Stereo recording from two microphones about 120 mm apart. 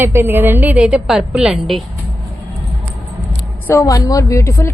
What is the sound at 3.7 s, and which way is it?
A woman's voice, 30° left (ahead or behind).